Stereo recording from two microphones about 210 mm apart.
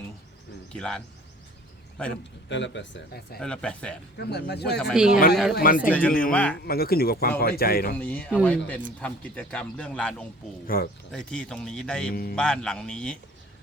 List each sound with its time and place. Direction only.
0.7 s speech: 5° left (ahead or behind)
2.5 s speech: 60° left (ahead or behind)
3.4 s speech: 5° left (ahead or behind)
4.2 s a man's voice: 50° left (ahead or behind)
4.9 s speech: 5° right (ahead or behind)
5.5 s a man's voice: 40° left (ahead or behind)
5.9 s speech: 5° left (ahead or behind)
6.7 s a man's voice: 45° left (ahead or behind)
7.9 s speech: 10° left (ahead or behind)
10.7 s a man's voice: 45° left (ahead or behind)
11.1 s speech: 5° left (ahead or behind)
12.1 s a man's voice: 45° left (ahead or behind)
12.4 s speech: 5° left (ahead or behind)